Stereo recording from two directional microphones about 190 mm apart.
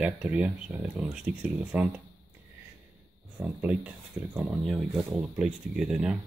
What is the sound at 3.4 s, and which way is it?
Speech, 5° right (ahead or behind).